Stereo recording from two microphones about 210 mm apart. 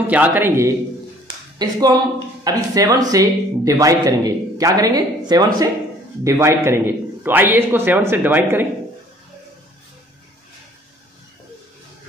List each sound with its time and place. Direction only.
0.0 s speech: 5° right (ahead or behind)